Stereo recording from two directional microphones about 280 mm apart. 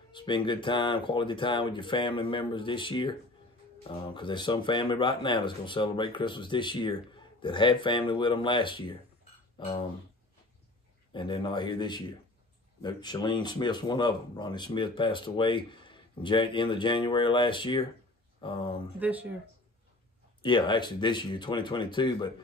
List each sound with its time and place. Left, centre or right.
0.1 s speech: centre
11.1 s speech: centre
18.9 s speech: centre
20.4 s speech: centre